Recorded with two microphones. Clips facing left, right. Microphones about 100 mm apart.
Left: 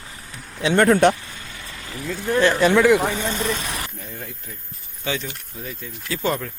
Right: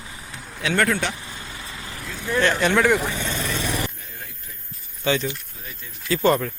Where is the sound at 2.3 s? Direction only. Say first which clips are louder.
Left 3 dB; 30° left (ahead or behind).